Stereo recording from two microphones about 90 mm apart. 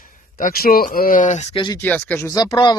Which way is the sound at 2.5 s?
60° left (ahead or behind).